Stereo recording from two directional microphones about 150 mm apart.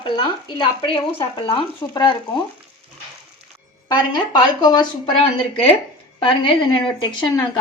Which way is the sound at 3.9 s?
30° left (ahead or behind).